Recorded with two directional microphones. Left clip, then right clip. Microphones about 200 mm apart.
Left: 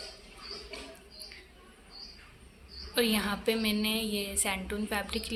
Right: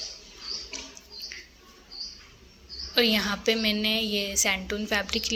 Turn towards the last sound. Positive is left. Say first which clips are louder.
# right 6 dB
turn(degrees=-10)  # may be behind; listen again after turning